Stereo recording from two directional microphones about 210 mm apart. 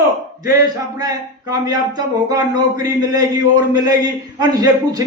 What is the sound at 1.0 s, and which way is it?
A man's voice, 20° right (ahead or behind).